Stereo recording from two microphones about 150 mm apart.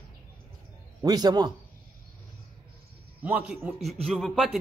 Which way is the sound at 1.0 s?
25° right (ahead or behind).